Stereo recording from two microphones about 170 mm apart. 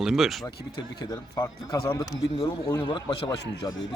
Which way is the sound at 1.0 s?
20° left (ahead or behind).